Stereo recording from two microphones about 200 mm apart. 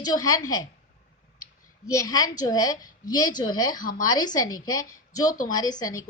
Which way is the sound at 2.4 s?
20° left (ahead or behind).